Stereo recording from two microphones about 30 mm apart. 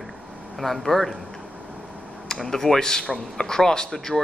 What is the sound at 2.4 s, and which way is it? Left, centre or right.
Speech, centre.